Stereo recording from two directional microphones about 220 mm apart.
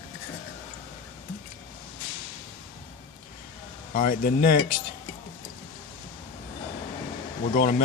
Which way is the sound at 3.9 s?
40° left (ahead or behind).